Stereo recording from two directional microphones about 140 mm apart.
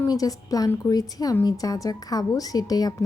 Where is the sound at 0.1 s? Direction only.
25° left (ahead or behind).